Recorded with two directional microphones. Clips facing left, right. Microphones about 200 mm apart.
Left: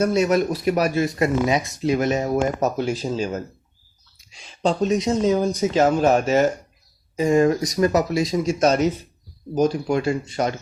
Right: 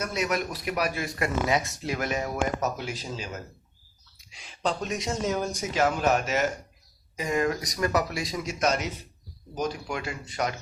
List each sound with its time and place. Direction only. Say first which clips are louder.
0.0 s speech: left 10 dB; 30° left (ahead or behind)
2.3 s speech: left 7 dB; 40° left (ahead or behind)
4.6 s speech: left 9 dB; 25° left (ahead or behind)
5.8 s speech: left 6 dB; 35° left (ahead or behind)